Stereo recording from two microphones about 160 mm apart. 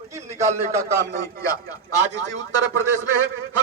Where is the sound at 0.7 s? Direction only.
20° right (ahead or behind).